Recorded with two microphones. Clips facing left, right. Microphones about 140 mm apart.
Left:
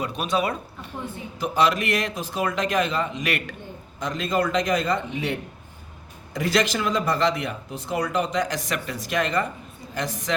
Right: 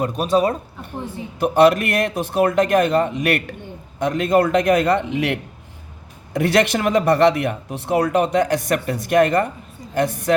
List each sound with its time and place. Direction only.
0.0 s speech: 40° right (ahead or behind)
1.4 s speech: 55° right (ahead or behind); by 5.4 s 70° right (ahead or behind)
6.3 s speech: 60° right (ahead or behind)